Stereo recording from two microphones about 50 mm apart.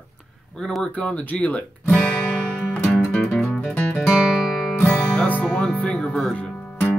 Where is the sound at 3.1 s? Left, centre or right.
Left.